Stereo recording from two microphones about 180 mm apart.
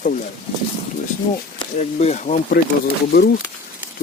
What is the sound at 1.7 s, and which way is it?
Speech, 40° left (ahead or behind).